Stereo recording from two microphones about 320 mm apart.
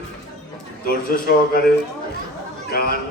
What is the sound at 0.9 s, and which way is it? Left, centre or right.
Speech, left.